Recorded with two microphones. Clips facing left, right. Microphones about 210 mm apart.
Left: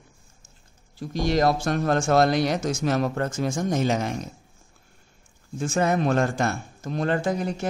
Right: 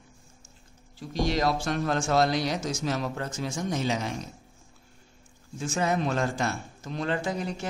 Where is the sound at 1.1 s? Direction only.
50° left (ahead or behind).